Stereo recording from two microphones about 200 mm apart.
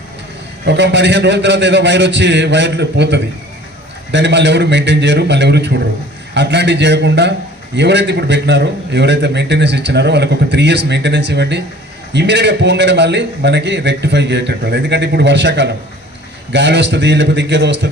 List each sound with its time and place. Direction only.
0.6 s a man's voice: 60° right (ahead or behind)